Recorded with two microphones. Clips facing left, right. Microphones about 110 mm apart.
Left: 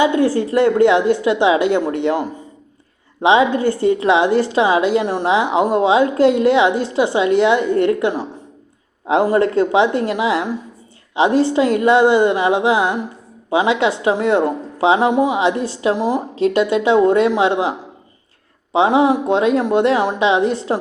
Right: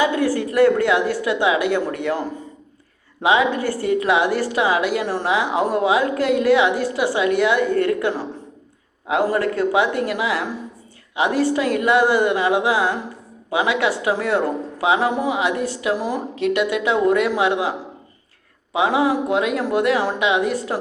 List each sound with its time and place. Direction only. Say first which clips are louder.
0.0 s a woman's voice: left 4 dB; 25° left (ahead or behind)